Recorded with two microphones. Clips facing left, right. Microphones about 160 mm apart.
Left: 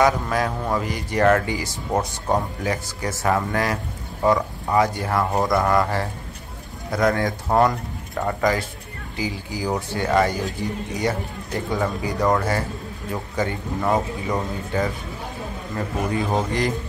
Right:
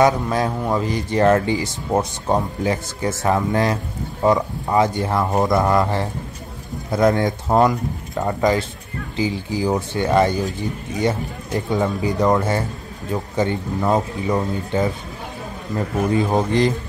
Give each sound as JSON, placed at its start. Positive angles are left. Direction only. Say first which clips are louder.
{"t": 0.0, "sound": "speech", "louder": "right 3 dB", "side_deg": -25}